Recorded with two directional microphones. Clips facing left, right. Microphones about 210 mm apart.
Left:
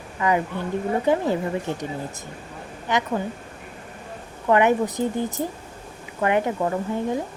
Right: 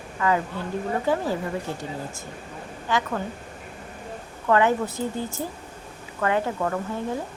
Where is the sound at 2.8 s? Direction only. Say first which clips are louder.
Left 2 dB; 20° left (ahead or behind).